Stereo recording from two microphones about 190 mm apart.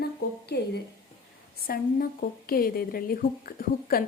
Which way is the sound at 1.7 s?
50° left (ahead or behind).